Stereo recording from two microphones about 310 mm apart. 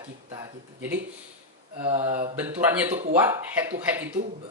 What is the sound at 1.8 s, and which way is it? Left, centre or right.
Speech, centre.